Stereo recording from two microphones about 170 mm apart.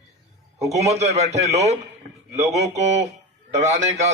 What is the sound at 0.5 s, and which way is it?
A man's voice, 40° right (ahead or behind).